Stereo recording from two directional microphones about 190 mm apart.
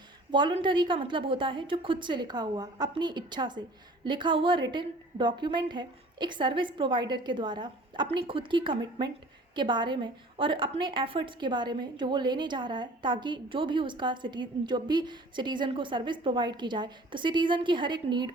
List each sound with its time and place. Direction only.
0.3 s a woman's voice: 25° right (ahead or behind)